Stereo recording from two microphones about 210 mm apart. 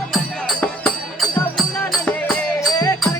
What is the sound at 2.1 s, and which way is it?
Music, centre (ahead or behind).